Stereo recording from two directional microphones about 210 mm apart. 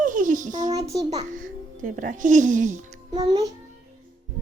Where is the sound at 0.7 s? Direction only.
15° right (ahead or behind).